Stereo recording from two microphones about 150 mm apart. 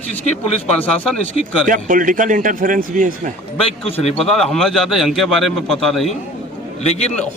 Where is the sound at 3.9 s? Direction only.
40° left (ahead or behind).